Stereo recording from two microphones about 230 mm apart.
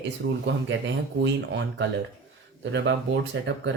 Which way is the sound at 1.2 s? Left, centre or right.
Right.